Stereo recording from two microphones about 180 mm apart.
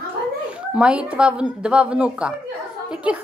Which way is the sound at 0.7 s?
5° right (ahead or behind).